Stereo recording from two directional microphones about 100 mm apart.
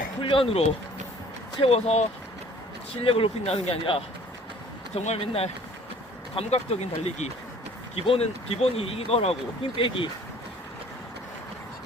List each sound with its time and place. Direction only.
0.2 s speech: 60° left (ahead or behind)
1.6 s speech: 90° left
3.0 s speech: 65° left (ahead or behind)
4.9 s speech: 85° left
6.3 s speech: 90° left
7.9 s speech: 70° left (ahead or behind)
9.7 s speech: 60° left (ahead or behind)